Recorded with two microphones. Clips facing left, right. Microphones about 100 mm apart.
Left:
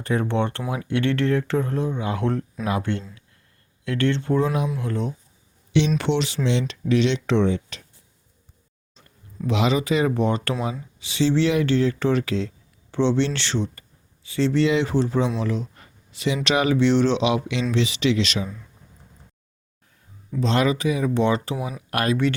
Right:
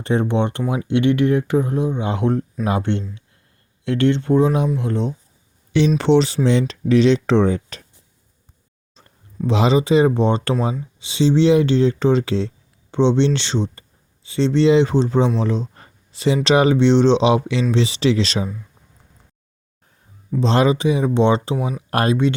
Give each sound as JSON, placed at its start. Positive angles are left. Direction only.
{"t": 0.0, "sound": "speech", "side_deg": -25}
{"t": 6.0, "sound": "speech", "side_deg": -35}
{"t": 9.5, "sound": "speech", "side_deg": -30}
{"t": 20.4, "sound": "speech", "side_deg": -30}